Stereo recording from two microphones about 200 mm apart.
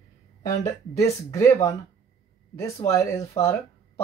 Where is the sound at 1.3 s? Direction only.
15° left (ahead or behind).